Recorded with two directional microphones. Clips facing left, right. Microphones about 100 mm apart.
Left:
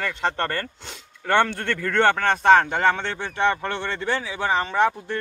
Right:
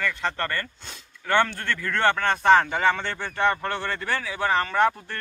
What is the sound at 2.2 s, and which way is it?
Speech, 55° left (ahead or behind).